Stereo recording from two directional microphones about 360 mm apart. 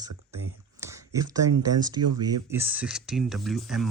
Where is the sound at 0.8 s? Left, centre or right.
Centre.